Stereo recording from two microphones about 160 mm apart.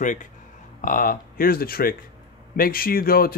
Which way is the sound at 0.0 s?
50° left (ahead or behind).